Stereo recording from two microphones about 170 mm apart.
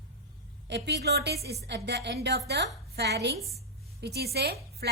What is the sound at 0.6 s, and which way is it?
A woman's voice, 90° right.